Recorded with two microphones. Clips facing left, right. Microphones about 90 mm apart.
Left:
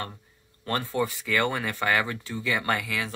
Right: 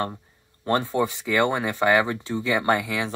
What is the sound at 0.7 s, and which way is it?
Speech, 20° right (ahead or behind).